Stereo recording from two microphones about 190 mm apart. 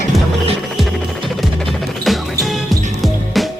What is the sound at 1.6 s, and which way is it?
Music, centre (ahead or behind).